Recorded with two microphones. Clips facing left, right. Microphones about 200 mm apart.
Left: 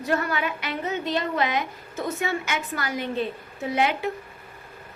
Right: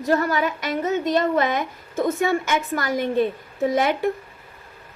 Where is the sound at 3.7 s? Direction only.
45° right (ahead or behind).